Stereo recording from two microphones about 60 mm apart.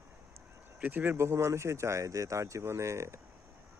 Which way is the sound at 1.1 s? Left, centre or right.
Right.